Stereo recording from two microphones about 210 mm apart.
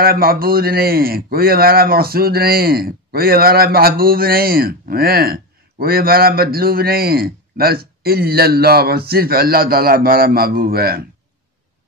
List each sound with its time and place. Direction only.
0.0 s a man's voice: 45° right (ahead or behind)